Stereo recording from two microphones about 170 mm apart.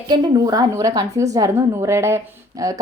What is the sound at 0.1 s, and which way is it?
A woman's voice, 20° right (ahead or behind).